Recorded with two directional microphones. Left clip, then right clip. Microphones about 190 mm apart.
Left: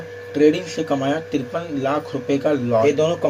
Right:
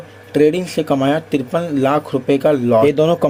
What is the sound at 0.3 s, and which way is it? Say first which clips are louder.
Speech: right 3 dB; 45° right (ahead or behind).